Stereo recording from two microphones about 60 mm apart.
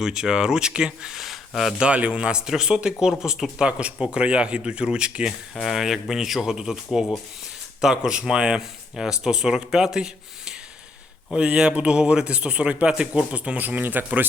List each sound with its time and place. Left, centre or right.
0.0 s speech: centre
1.8 s speech: centre